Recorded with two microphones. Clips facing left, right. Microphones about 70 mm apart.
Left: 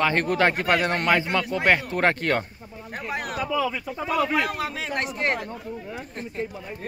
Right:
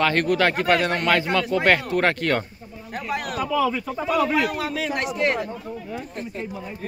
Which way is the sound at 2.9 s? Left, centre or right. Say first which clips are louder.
Right 3 dB; left.